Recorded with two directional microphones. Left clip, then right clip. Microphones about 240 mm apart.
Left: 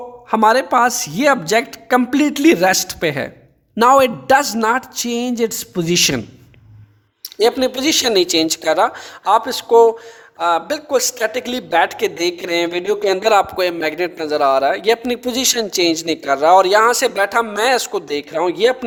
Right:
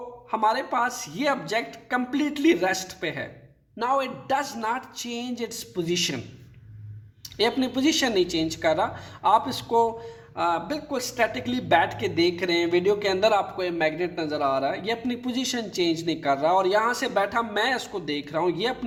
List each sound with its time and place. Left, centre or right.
0.3 s a man's voice: left
7.3 s a man's voice: left